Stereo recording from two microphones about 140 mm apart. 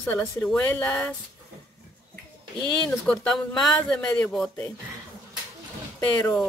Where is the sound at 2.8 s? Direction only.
10° left (ahead or behind).